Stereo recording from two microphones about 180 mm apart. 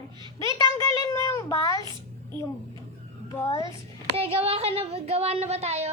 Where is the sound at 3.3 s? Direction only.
15° left (ahead or behind).